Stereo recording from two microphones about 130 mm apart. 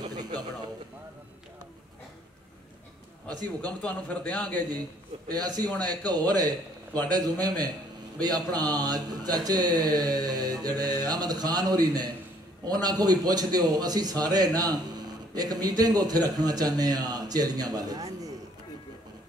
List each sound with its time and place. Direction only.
0.0 s a sound: 30° right (ahead or behind)
3.3 s a man's voice: 30° right (ahead or behind)
3.8 s a man's voice: 10° left (ahead or behind)
5.3 s a man's voice: 30° right (ahead or behind)